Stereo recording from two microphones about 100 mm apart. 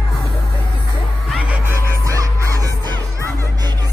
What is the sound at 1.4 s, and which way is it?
Music, 15° right (ahead or behind).